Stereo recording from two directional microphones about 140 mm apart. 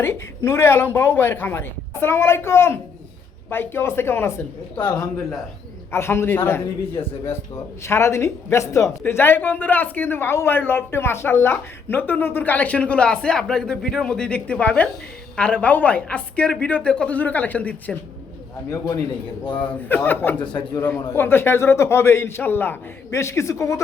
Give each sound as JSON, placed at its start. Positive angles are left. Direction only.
{"t": 0.0, "sound": "speech", "side_deg": 15}
{"t": 4.8, "sound": "a man's voice", "side_deg": 30}
{"t": 5.9, "sound": "speech", "side_deg": 20}
{"t": 18.7, "sound": "a man's voice", "side_deg": 25}
{"t": 20.1, "sound": "speech", "side_deg": 15}
{"t": 20.4, "sound": "a man's voice", "side_deg": 35}
{"t": 20.7, "sound": "speech", "side_deg": 15}